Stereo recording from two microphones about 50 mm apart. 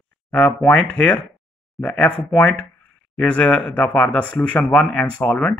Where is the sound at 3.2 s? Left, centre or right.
Centre.